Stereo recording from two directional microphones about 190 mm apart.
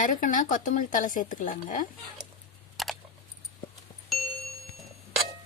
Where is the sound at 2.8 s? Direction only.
Centre (ahead or behind).